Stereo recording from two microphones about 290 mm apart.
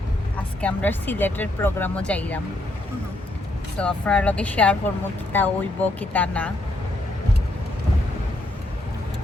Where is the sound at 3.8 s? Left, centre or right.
Centre.